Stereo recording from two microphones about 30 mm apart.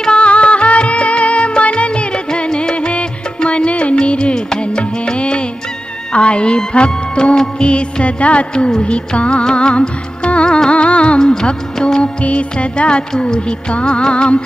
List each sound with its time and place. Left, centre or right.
0.1 s music: left
6.1 s speech: left
8.5 s speech: left
9.4 s music: left
13.2 s speech: left